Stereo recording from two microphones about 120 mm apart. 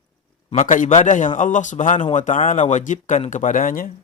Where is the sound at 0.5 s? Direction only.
90° left.